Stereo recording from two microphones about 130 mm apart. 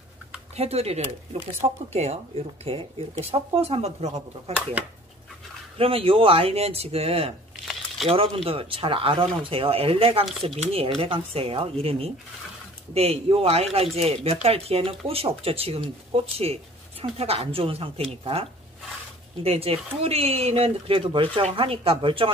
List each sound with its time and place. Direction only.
0.6 s speech: 50° right (ahead or behind)
5.8 s speech: 45° right (ahead or behind)
8.5 s speech: 45° right (ahead or behind)